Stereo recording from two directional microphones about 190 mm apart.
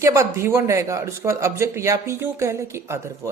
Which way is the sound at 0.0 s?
15° right (ahead or behind).